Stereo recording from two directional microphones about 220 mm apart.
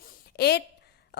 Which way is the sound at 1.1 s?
50° left (ahead or behind).